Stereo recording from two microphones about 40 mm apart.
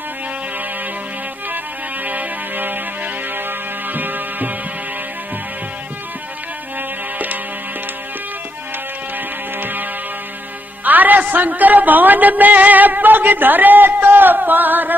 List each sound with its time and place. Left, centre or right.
2.0 s music: right
9.6 s music: right
10.8 s a man's voice: right